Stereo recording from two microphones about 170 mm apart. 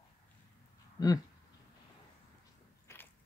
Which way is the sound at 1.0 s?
20° left (ahead or behind).